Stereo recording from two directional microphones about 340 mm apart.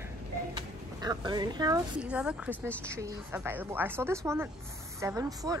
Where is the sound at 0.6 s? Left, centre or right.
Centre.